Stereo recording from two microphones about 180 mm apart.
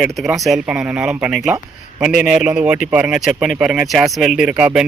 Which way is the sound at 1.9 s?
5° right (ahead or behind).